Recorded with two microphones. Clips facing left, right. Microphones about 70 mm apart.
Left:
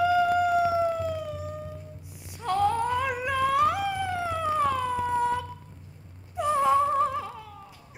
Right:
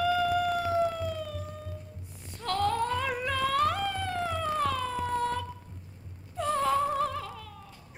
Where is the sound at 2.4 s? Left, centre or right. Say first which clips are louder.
Left 3 dB; centre.